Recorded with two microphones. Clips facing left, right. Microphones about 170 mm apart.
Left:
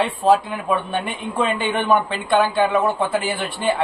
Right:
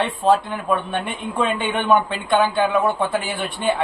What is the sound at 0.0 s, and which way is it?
Speech, centre (ahead or behind).